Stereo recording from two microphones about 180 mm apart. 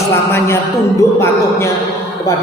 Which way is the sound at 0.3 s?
15° left (ahead or behind).